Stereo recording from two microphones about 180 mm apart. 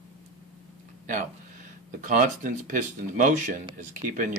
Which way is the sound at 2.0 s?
45° right (ahead or behind).